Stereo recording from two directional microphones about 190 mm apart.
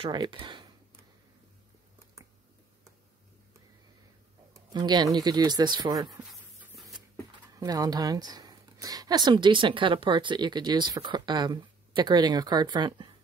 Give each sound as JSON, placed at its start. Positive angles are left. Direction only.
{"t": 0.0, "sound": "speech", "side_deg": -25}
{"t": 4.6, "sound": "a woman's voice", "side_deg": -20}
{"t": 6.1, "sound": "a sound", "side_deg": -5}
{"t": 7.5, "sound": "a woman's voice", "side_deg": -20}